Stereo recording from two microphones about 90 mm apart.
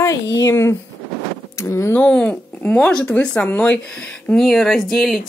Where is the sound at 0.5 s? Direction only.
30° left (ahead or behind).